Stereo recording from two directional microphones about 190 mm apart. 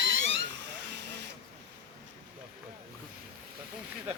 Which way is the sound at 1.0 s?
65° right (ahead or behind).